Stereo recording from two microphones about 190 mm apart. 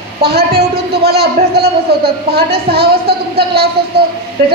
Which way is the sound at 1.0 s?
55° right (ahead or behind).